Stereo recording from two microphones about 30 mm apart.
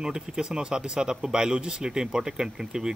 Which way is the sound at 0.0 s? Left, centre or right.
Right.